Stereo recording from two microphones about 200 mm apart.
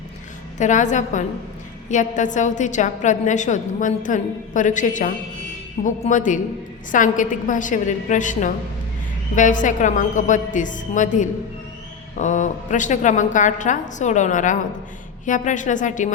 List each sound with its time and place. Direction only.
0.6 s a woman's voice: 40° left (ahead or behind)